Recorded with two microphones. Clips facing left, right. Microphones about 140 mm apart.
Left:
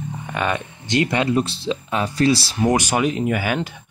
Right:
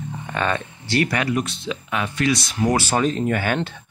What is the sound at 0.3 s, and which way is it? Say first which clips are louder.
Speech: even; 10° left (ahead or behind).